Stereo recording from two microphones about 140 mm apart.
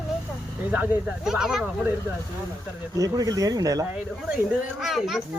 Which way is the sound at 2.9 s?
25° right (ahead or behind).